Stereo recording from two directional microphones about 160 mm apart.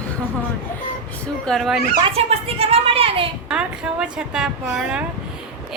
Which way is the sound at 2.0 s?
40° right (ahead or behind).